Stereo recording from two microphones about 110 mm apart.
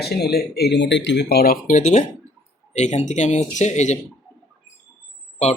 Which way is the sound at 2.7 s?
90° left.